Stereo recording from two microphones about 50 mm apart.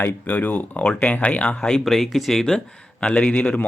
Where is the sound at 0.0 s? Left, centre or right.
Left.